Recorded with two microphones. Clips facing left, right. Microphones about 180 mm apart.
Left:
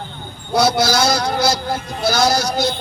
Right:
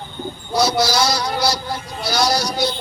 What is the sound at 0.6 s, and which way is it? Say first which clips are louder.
A man's voice: left 2 dB; 55° left (ahead or behind).